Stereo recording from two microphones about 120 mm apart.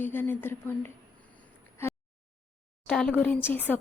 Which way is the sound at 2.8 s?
5° left (ahead or behind).